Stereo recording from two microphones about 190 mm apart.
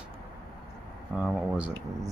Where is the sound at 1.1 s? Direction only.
5° right (ahead or behind).